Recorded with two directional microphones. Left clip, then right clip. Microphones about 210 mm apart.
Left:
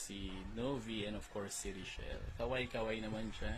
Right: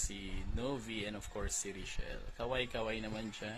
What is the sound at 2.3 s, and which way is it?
Speech, 15° right (ahead or behind).